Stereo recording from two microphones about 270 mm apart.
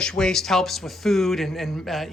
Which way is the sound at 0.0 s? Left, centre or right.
Centre.